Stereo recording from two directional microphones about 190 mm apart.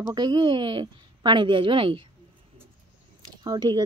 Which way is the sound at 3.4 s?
20° right (ahead or behind).